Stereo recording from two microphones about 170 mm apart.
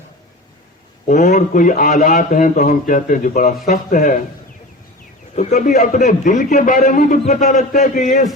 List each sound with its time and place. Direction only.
1.0 s a man's voice: 45° left (ahead or behind)
5.3 s a man's voice: 45° left (ahead or behind)